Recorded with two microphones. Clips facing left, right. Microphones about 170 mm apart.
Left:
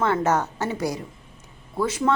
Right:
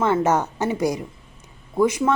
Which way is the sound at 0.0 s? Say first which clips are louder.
Right 2 dB; 15° right (ahead or behind).